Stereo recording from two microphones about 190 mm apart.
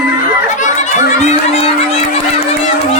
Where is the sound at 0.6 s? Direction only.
40° left (ahead or behind).